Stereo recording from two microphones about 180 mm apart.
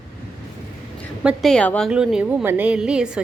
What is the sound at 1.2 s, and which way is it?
A woman's voice, centre (ahead or behind).